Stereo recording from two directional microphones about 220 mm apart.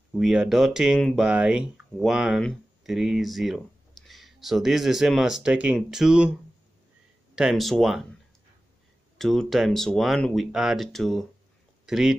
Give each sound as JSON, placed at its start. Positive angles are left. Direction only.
{"t": 0.1, "sound": "speech", "side_deg": 0}
{"t": 7.3, "sound": "speech", "side_deg": 0}
{"t": 9.2, "sound": "speech", "side_deg": 0}